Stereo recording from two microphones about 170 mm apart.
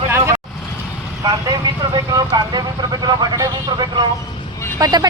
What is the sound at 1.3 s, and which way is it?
Speech, 20° right (ahead or behind).